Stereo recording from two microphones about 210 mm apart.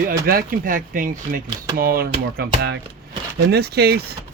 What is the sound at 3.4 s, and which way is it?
Speech, 50° right (ahead or behind).